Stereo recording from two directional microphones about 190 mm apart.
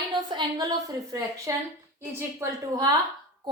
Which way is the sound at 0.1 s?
25° right (ahead or behind).